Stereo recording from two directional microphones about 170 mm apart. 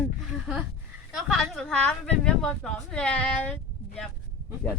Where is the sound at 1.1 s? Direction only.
Centre (ahead or behind).